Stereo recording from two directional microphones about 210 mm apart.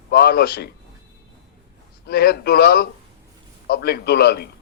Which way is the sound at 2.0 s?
50° left (ahead or behind).